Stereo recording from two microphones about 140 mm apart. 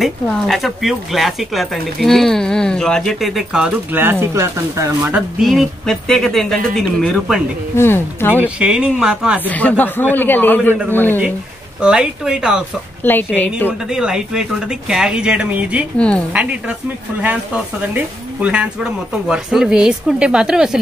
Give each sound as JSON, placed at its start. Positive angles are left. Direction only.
{"t": 0.0, "sound": "speech", "side_deg": 0}
{"t": 5.4, "sound": "speech", "side_deg": 0}
{"t": 7.7, "sound": "a man's voice", "side_deg": 15}
{"t": 8.5, "sound": "a woman's voice", "side_deg": -5}
{"t": 9.5, "sound": "a man's voice", "side_deg": 10}
{"t": 11.8, "sound": "speech", "side_deg": -5}
{"t": 13.0, "sound": "a man's voice", "side_deg": 15}
{"t": 13.7, "sound": "speech", "side_deg": -5}
{"t": 16.0, "sound": "a man's voice", "side_deg": 10}
{"t": 16.3, "sound": "a woman's voice", "side_deg": -10}
{"t": 17.9, "sound": "speech", "side_deg": -10}